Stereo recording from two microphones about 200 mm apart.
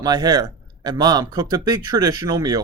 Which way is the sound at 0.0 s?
20° right (ahead or behind).